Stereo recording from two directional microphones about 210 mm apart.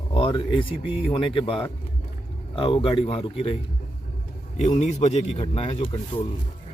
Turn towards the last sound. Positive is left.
turn(degrees=25)  # may be behind; listen again after turning